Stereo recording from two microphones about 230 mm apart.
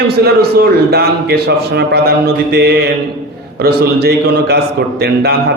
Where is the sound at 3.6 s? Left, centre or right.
Right.